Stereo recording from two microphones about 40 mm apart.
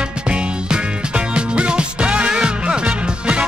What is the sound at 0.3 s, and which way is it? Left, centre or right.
Music, right.